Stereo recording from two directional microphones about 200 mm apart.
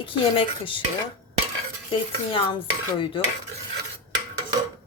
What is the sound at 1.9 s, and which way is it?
Cutlery, 25° left (ahead or behind).